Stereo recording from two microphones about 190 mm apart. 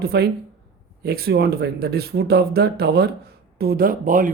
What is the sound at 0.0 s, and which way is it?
A man's voice, 55° right (ahead or behind).